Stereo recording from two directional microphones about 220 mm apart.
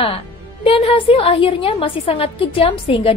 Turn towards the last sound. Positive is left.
turn(degrees=25)  # may be behind; listen again after turning